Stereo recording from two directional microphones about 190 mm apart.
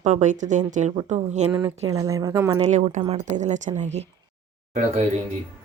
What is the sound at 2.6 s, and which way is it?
A woman's voice, 35° right (ahead or behind).